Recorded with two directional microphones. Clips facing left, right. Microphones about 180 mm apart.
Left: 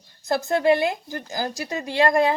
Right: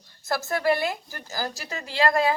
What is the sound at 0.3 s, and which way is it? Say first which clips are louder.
A woman's voice: left 5 dB; 20° left (ahead or behind).